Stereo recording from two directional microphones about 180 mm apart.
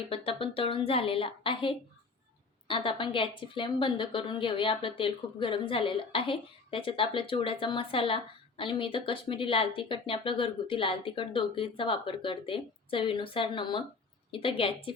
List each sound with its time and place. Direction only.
0.1 s a woman's voice: 30° left (ahead or behind)